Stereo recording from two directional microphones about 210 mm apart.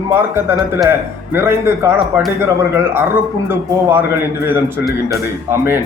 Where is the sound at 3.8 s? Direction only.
10° right (ahead or behind).